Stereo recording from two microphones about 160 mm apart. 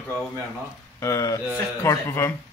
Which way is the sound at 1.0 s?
20° left (ahead or behind).